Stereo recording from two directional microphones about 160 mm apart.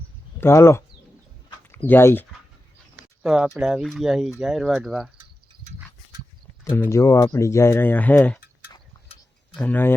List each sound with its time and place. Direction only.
0.3 s speech: 15° left (ahead or behind)
3.2 s speech: 5° right (ahead or behind)
6.7 s speech: 15° left (ahead or behind)
9.6 s speech: 10° left (ahead or behind)